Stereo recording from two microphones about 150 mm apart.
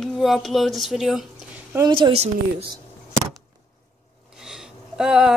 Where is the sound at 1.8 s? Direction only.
30° right (ahead or behind).